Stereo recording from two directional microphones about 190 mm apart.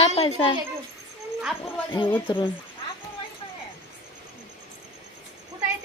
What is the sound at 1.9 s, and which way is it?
Speech, 25° left (ahead or behind).